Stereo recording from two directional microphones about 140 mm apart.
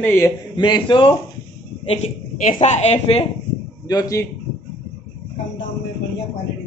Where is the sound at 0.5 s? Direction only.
35° left (ahead or behind).